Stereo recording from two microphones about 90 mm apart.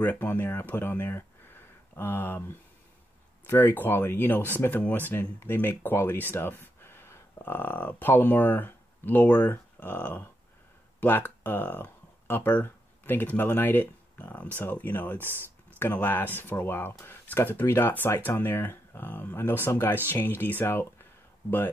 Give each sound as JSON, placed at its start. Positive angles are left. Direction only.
{"t": 0.0, "sound": "speech", "side_deg": 20}